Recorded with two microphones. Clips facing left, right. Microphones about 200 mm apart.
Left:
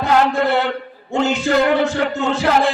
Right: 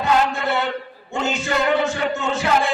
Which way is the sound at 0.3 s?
60° left (ahead or behind).